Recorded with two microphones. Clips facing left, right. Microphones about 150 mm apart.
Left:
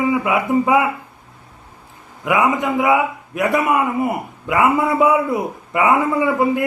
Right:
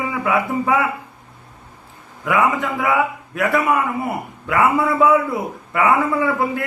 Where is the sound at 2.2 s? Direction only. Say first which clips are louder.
Left 1 dB; 20° left (ahead or behind).